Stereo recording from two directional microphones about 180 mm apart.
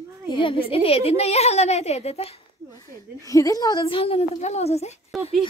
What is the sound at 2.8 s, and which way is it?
A woman's voice, 15° left (ahead or behind).